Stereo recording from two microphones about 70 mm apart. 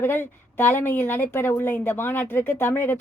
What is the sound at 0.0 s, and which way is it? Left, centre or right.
A woman's voice, left.